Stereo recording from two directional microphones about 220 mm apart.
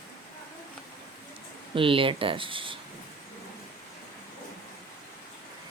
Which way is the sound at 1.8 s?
25° right (ahead or behind).